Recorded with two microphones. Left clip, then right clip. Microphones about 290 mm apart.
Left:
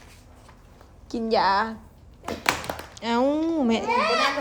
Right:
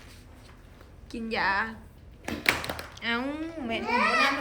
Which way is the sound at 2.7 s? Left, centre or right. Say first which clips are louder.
Left 5 dB; centre.